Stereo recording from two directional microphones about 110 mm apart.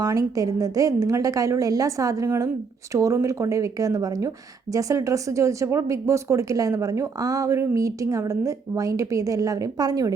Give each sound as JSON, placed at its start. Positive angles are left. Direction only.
{"t": 0.0, "sound": "a woman's voice", "side_deg": -30}